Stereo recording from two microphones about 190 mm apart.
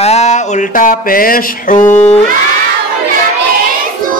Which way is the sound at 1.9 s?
35° left (ahead or behind).